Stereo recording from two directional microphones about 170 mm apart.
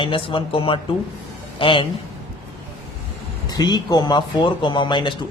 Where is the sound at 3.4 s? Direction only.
25° left (ahead or behind).